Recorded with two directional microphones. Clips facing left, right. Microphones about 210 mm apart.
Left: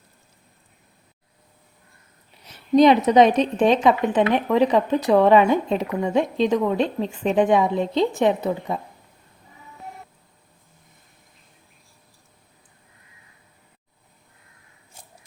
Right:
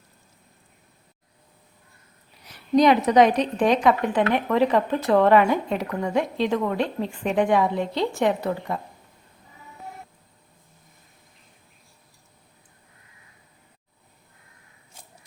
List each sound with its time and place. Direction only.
2.5 s a woman's voice: 25° left (ahead or behind)